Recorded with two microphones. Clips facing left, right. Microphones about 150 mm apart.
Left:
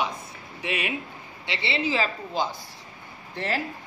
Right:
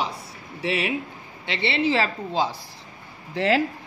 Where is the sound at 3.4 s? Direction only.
90° right.